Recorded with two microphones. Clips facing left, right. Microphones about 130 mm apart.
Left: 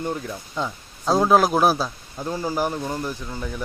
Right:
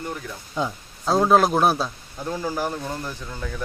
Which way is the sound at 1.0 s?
Centre (ahead or behind).